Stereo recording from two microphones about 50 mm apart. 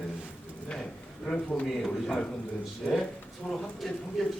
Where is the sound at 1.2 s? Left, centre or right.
Centre.